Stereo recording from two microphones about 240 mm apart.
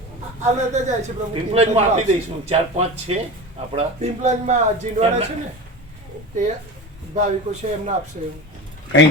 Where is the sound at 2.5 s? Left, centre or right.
Right.